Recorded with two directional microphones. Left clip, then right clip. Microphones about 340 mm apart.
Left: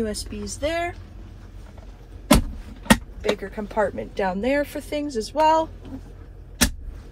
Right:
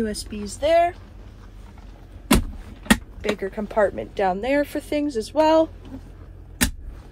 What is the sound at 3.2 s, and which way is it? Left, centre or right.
Speech, right.